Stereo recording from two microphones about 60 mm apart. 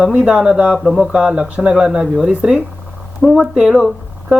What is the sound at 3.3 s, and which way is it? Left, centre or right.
Speech, centre.